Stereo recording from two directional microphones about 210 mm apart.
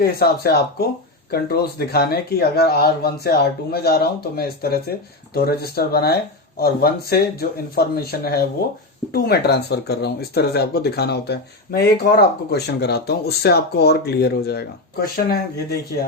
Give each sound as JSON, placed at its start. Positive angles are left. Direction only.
{"t": 0.0, "sound": "speech", "side_deg": 45}